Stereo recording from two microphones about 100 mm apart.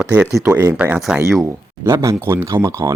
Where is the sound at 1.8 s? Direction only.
30° right (ahead or behind).